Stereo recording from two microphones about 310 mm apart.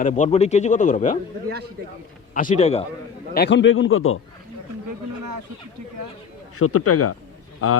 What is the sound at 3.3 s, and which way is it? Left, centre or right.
Speech, left.